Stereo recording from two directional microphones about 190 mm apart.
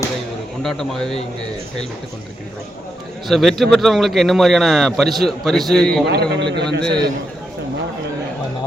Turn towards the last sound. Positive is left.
turn(degrees=-20)  # may be behind; listen again after turning